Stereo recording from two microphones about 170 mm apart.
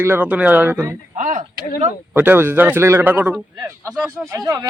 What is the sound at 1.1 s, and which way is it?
Speech, 50° right (ahead or behind).